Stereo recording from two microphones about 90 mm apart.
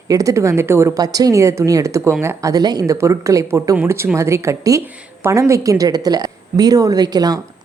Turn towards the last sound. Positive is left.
turn(degrees=-45)  # may be behind; listen again after turning